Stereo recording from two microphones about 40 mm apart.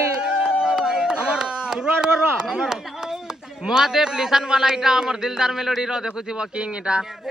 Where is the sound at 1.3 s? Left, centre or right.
Right.